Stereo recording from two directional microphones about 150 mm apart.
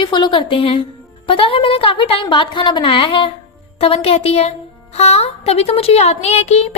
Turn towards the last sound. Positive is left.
turn(degrees=45)  # may be behind; listen again after turning